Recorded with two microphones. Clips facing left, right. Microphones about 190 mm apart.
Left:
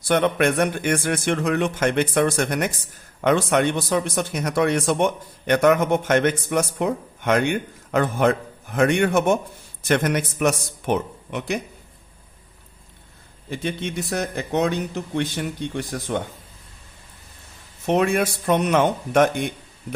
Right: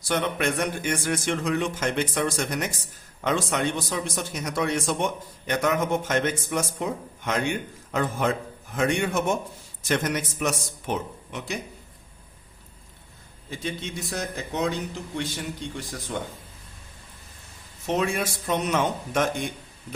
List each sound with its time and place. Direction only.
0.1 s speech: 60° left (ahead or behind)
13.5 s speech: 60° left (ahead or behind)
17.8 s speech: 60° left (ahead or behind)